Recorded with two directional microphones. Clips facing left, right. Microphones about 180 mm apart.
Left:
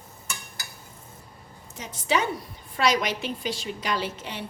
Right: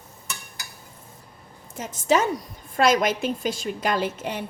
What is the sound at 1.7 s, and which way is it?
A woman's voice, 50° right (ahead or behind).